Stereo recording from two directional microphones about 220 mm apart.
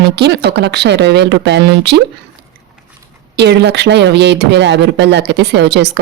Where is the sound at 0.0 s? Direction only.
50° right (ahead or behind).